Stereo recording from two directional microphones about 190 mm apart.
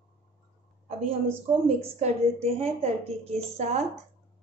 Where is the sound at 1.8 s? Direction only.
35° right (ahead or behind).